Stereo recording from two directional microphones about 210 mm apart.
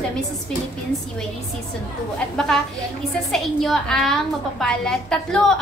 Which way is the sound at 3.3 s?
Centre (ahead or behind).